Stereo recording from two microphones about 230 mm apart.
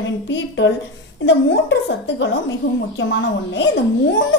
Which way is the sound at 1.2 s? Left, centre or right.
Left.